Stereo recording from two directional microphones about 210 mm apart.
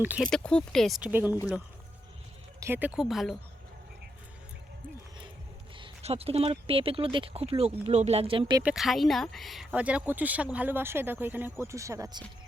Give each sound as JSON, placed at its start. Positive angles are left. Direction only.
{"t": 0.0, "sound": "speech", "side_deg": -10}
{"t": 0.3, "sound": "speech", "side_deg": 5}
{"t": 2.6, "sound": "speech", "side_deg": -10}
{"t": 5.7, "sound": "speech", "side_deg": -25}
{"t": 8.6, "sound": "speech", "side_deg": 0}